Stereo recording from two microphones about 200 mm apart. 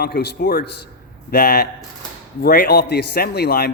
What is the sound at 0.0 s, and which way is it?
A man's voice, 55° left (ahead or behind).